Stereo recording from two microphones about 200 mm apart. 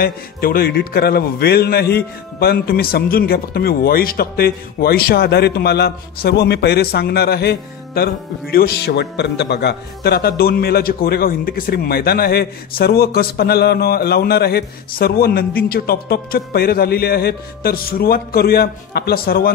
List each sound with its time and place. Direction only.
0.0 s a man's voice: 50° left (ahead or behind)